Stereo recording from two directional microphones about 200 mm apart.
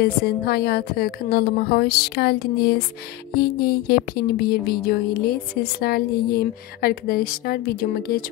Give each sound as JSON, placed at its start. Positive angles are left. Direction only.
{"t": 0.0, "sound": "speech", "side_deg": 50}